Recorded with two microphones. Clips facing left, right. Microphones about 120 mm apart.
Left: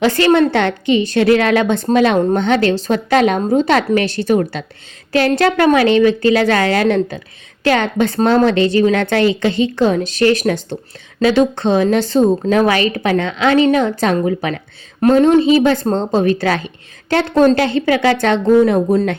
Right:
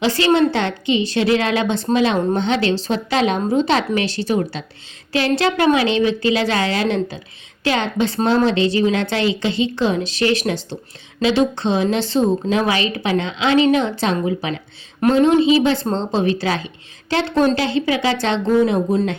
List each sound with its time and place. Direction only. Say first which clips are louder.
0.0 s a woman's voice: left 3 dB; 50° left (ahead or behind)
15.0 s a woman's voice: left 3 dB; 35° left (ahead or behind)